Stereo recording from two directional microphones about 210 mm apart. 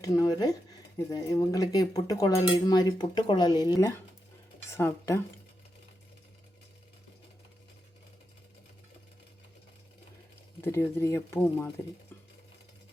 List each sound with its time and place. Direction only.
0.0 s speech: 15° left (ahead or behind)
10.6 s speech: 10° left (ahead or behind)